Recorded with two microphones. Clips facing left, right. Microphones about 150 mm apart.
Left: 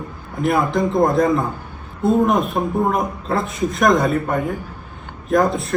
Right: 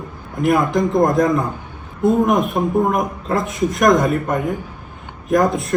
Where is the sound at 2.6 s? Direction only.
5° left (ahead or behind).